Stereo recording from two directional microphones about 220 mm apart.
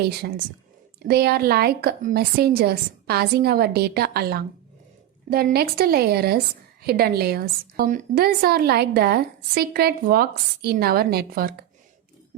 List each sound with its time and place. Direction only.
0.2 s a woman's voice: 45° right (ahead or behind)